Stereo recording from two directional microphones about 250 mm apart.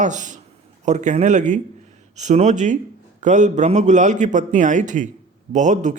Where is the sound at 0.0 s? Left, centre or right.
Right.